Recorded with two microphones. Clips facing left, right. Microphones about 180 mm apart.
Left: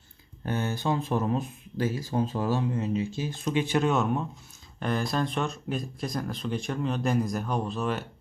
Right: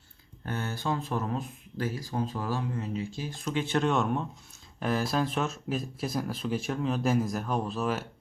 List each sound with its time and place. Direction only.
0.4 s speech: 20° left (ahead or behind); by 8.0 s centre (ahead or behind)